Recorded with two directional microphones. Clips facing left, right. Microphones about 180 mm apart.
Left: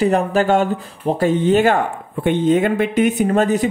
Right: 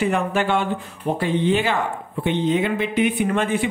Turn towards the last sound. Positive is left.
turn(degrees=40)  # may be behind; listen again after turning